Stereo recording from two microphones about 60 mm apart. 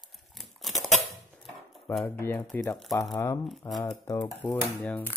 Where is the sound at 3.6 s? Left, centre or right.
Left.